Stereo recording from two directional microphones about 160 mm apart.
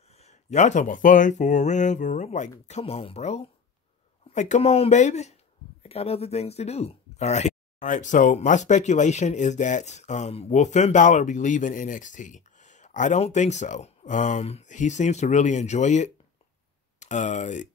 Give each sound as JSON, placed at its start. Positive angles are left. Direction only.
{"t": 0.0, "sound": "speech", "side_deg": 40}